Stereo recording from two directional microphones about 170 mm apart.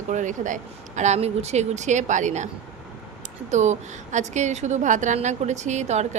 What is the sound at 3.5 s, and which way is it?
Speech, 45° right (ahead or behind).